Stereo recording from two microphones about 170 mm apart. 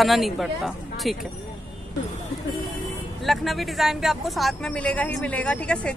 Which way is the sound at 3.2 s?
Centre (ahead or behind).